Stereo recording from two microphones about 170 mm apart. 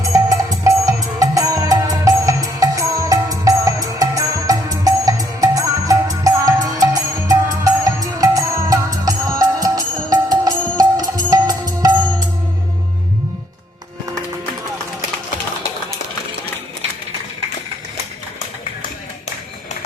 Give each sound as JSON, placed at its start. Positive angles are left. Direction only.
{"t": 0.0, "sound": "music", "side_deg": -20}